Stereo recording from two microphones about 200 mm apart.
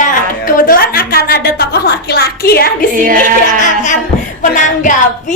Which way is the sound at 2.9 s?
45° right (ahead or behind).